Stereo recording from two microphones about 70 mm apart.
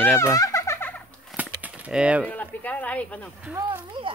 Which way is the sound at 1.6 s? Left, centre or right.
Right.